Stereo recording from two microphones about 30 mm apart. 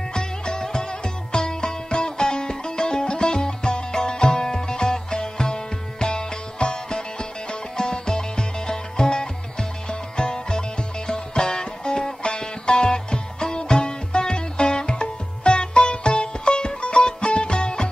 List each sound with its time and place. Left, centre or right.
0.1 s music: left